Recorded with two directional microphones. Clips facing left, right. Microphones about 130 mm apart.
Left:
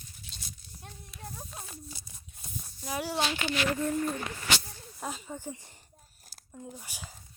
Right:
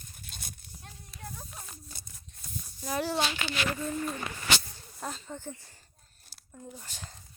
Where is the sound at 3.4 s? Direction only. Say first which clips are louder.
Left 3 dB; 60° left (ahead or behind).